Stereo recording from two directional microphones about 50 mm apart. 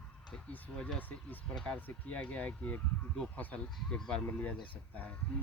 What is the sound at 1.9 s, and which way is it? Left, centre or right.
Speech, left.